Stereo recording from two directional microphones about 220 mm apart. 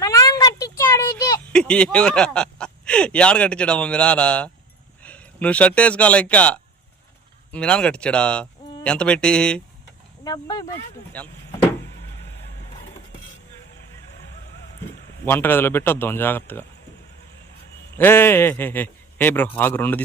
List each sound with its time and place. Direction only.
0.0 s a sound: 15° left (ahead or behind)
1.5 s speech: 5° left (ahead or behind)
10.2 s speech: 15° left (ahead or behind)
11.1 s vehicle: 5° left (ahead or behind)
15.2 s speech: 10° left (ahead or behind)
17.9 s a man's voice: 10° left (ahead or behind)